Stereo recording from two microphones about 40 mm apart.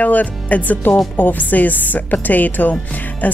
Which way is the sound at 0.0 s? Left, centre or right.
Left.